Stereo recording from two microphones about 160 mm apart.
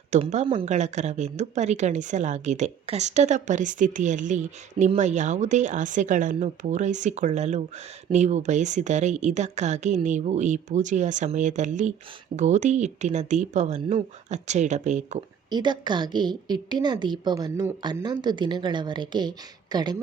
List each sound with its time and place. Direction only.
0.2 s speech: 45° right (ahead or behind)
15.4 s a woman's voice: 30° right (ahead or behind)